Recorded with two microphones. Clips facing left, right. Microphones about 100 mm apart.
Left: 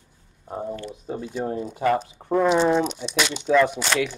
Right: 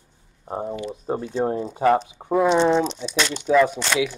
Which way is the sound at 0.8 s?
40° right (ahead or behind).